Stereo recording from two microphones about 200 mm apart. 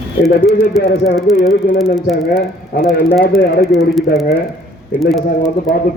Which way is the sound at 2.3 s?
50° left (ahead or behind).